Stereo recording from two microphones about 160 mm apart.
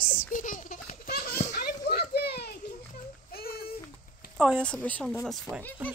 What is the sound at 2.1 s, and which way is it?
Children playing, 85° left.